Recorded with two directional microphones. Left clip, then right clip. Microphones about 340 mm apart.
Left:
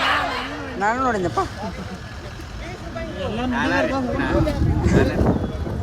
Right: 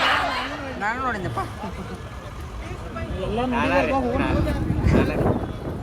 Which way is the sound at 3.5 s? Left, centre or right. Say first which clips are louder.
Even; left.